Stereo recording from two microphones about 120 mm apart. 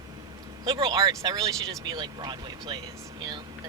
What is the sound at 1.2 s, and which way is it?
Speech, 30° right (ahead or behind).